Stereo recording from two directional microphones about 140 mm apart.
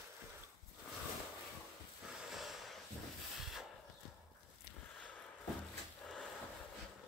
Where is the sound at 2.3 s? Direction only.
Centre (ahead or behind).